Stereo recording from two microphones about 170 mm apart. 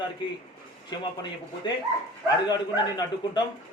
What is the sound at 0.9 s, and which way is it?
Speech, 25° left (ahead or behind).